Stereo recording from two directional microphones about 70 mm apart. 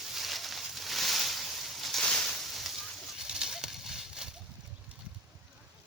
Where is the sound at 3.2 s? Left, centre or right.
Centre.